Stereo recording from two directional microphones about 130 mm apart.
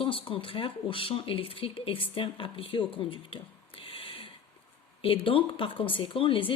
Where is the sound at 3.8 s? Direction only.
45° left (ahead or behind).